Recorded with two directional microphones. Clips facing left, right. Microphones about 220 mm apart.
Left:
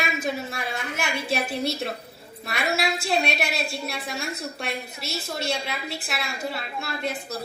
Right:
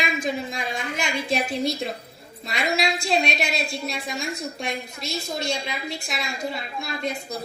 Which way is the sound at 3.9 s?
15° right (ahead or behind).